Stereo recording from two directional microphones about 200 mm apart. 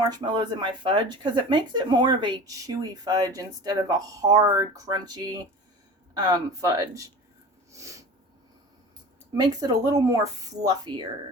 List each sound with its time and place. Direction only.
0.1 s speech: 20° right (ahead or behind)
7.7 s snort: 15° right (ahead or behind)
9.3 s speech: 20° right (ahead or behind)